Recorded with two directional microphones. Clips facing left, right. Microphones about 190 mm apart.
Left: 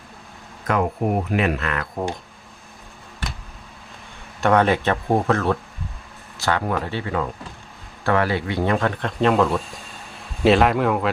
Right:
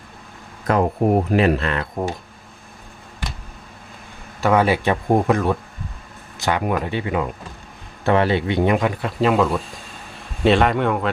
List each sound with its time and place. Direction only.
0.7 s speech: 35° right (ahead or behind)
4.4 s a man's voice: 5° right (ahead or behind)